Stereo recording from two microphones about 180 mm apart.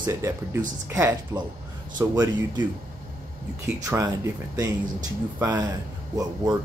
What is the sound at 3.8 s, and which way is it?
Speech, 20° right (ahead or behind).